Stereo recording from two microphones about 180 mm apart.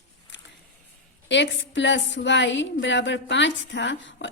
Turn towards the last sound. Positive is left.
turn(degrees=85)